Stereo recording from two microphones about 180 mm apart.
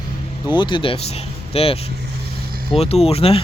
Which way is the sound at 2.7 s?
35° left (ahead or behind).